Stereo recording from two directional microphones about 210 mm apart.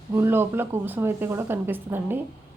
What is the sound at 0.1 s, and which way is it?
A woman's voice, 10° right (ahead or behind).